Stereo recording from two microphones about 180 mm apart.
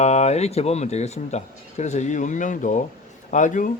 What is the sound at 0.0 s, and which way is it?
Speech, 40° left (ahead or behind).